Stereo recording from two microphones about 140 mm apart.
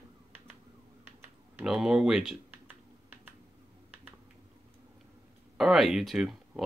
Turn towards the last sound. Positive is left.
turn(degrees=0)  # may be behind; listen again after turning